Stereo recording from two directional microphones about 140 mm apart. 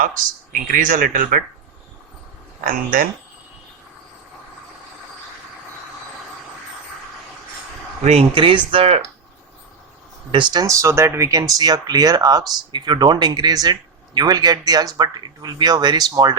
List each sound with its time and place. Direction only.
0.5 s speech: 70° right (ahead or behind)
2.6 s speech: 75° right (ahead or behind)
8.0 s speech: 45° right (ahead or behind)
10.3 s speech: 30° right (ahead or behind)